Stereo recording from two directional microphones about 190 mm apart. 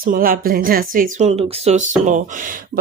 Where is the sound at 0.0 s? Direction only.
50° right (ahead or behind).